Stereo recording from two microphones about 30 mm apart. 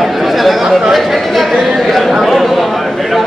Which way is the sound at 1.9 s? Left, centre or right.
Centre.